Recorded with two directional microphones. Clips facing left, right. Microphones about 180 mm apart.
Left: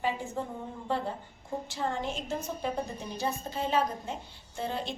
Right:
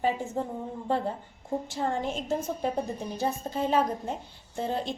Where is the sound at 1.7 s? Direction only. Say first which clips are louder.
Right 2 dB; 50° right (ahead or behind).